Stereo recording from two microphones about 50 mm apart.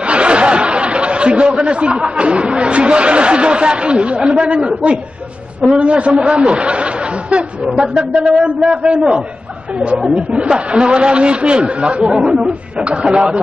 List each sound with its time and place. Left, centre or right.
0.0 s chatter: right
5.8 s speech: right